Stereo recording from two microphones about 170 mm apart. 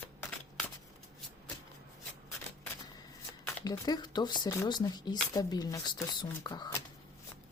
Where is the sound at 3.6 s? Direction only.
25° left (ahead or behind).